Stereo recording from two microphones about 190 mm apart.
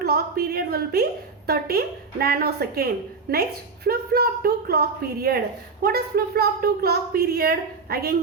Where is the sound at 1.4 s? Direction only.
55° right (ahead or behind).